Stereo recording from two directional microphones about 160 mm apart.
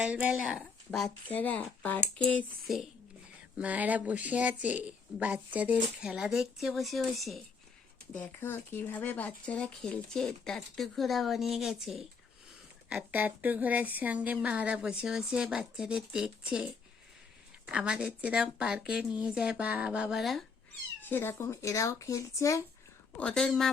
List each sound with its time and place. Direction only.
0.0 s speech: 10° right (ahead or behind)
8.1 s speech: 10° left (ahead or behind); by 16.3 s 5° right (ahead or behind)
17.7 s speech: 5° right (ahead or behind)
21.0 s speech: 15° left (ahead or behind)
23.1 s speech: 5° left (ahead or behind)